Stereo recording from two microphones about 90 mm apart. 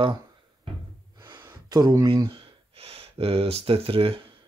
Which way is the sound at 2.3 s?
90° right.